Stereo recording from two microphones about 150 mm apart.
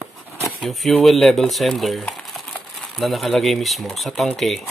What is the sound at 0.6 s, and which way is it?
Speech, centre (ahead or behind).